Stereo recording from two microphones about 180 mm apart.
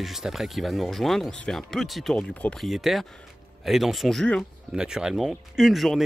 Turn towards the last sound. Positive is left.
turn(degrees=0)  # may be behind; listen again after turning